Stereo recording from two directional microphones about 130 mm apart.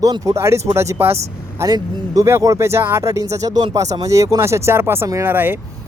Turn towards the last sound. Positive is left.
turn(degrees=-15)  # may be behind; listen again after turning